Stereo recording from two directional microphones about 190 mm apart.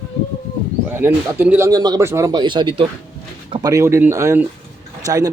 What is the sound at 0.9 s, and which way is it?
Speech, 10° right (ahead or behind).